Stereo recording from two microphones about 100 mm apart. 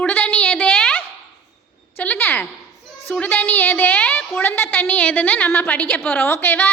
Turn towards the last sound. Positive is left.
turn(degrees=20)  # may be behind; listen again after turning